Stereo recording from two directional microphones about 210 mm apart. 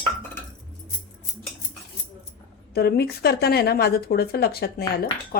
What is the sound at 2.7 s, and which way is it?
A woman's voice, 50° left (ahead or behind).